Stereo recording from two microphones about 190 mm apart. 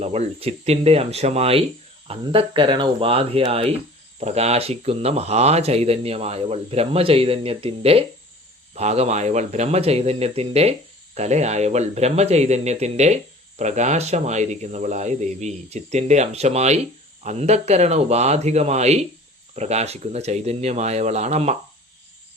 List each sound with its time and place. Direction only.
0.0 s speech: 35° right (ahead or behind)